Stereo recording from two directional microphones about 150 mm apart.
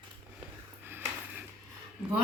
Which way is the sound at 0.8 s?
15° right (ahead or behind).